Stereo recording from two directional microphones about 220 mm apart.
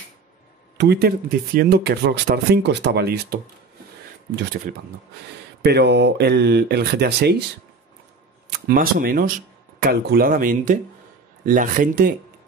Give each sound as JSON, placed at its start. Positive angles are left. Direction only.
{"t": 0.7, "sound": "speech", "side_deg": -45}
{"t": 5.6, "sound": "speech", "side_deg": -50}
{"t": 8.5, "sound": "speech", "side_deg": -40}